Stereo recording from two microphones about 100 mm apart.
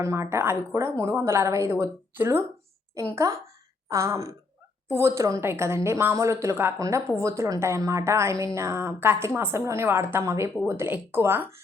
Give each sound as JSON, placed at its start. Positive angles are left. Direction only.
{"t": 0.0, "sound": "a woman's voice", "side_deg": -30}